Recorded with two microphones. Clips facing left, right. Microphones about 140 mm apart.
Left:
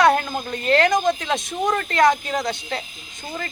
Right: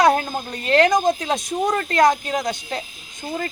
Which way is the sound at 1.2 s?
35° right (ahead or behind).